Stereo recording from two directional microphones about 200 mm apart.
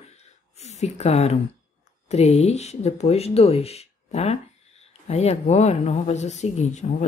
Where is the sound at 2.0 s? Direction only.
30° left (ahead or behind).